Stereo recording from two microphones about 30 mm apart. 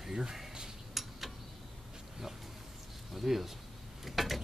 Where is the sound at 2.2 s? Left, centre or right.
Centre.